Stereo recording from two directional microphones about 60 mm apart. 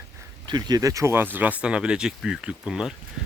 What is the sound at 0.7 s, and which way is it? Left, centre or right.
Speech, right.